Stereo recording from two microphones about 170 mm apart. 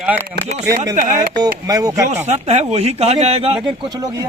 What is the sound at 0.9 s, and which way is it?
Speech, 50° right (ahead or behind).